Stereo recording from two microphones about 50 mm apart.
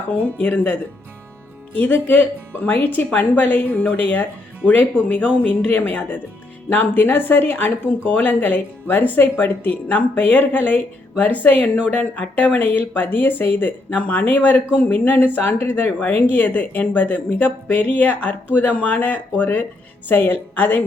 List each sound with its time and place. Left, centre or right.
0.1 s speech: left
1.8 s speech: left
5.6 s speech: left
16.0 s speech: left
20.1 s speech: left